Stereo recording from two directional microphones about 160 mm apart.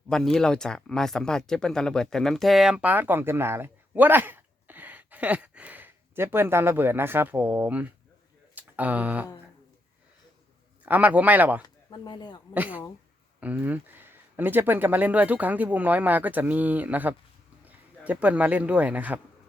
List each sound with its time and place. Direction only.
0.1 s speech: 5° left (ahead or behind)
10.8 s speech: 10° right (ahead or behind)
11.6 s speech: 25° left (ahead or behind)
12.5 s speech: 10° right (ahead or behind)